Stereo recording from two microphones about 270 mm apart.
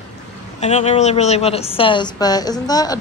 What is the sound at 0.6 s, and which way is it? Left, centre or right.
Speech, left.